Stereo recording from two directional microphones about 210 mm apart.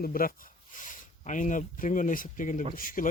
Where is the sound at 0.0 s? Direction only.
45° left (ahead or behind).